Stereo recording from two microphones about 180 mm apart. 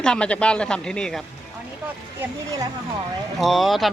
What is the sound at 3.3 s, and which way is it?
Speech, centre (ahead or behind).